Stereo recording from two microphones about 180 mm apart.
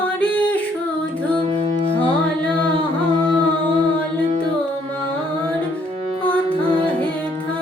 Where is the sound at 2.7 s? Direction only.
25° right (ahead or behind).